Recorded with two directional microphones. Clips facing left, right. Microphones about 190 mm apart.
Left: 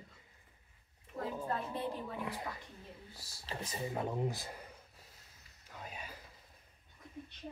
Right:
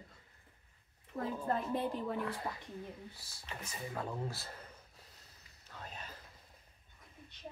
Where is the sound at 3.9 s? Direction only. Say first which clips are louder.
Left 4 dB; 20° left (ahead or behind).